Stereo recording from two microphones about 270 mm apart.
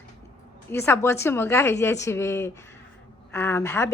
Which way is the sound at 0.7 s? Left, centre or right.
Centre.